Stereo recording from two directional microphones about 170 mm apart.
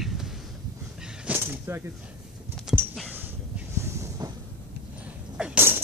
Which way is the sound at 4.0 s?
20° right (ahead or behind).